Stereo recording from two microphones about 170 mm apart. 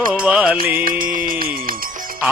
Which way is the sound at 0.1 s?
5° right (ahead or behind).